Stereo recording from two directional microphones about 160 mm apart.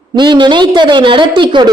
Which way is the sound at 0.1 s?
30° right (ahead or behind).